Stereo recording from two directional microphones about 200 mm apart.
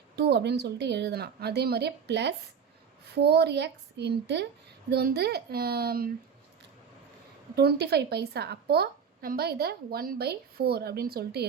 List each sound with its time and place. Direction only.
0.2 s a woman's voice: 55° right (ahead or behind)
7.5 s a woman's voice: 55° right (ahead or behind)